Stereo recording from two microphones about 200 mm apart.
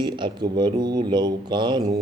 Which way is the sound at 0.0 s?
20° right (ahead or behind).